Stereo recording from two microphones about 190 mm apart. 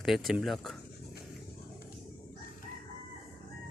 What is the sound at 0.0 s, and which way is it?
Speech, centre (ahead or behind).